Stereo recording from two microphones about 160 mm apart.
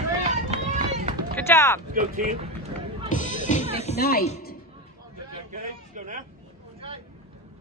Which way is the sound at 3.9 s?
70° left (ahead or behind).